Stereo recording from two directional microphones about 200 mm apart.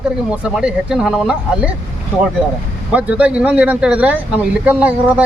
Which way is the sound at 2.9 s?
5° right (ahead or behind).